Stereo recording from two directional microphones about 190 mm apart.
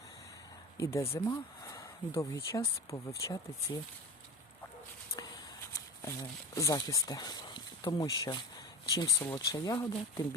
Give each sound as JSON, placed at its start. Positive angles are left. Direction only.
{"t": 0.8, "sound": "speech", "side_deg": 15}
{"t": 5.7, "sound": "speech", "side_deg": 15}